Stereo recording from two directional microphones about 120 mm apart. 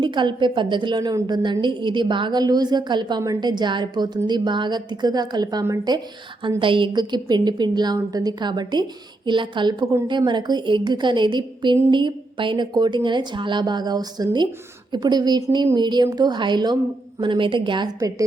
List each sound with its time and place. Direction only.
0.0 s a woman's voice: 40° right (ahead or behind)
6.6 s a woman's voice: 45° right (ahead or behind)